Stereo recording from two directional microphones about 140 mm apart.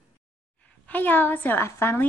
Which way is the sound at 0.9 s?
15° left (ahead or behind).